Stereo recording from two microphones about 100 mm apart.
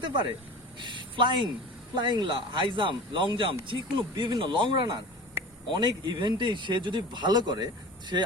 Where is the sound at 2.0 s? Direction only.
50° right (ahead or behind).